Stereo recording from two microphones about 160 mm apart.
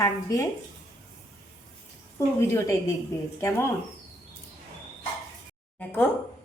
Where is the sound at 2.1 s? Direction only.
15° left (ahead or behind).